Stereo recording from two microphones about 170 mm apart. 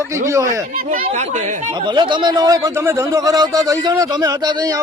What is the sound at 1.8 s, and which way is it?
A man's voice, 30° right (ahead or behind).